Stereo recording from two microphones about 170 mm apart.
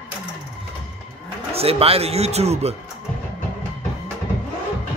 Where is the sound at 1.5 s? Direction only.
35° right (ahead or behind).